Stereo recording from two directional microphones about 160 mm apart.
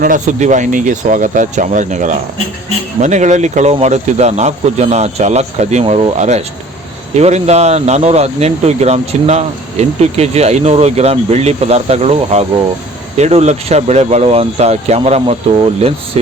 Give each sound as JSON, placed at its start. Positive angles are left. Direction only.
{"t": 0.0, "sound": "speech", "side_deg": -55}